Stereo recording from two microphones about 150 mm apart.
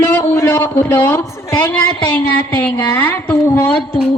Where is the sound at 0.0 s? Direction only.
15° left (ahead or behind).